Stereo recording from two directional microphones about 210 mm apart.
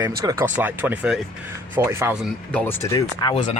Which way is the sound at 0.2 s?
15° right (ahead or behind).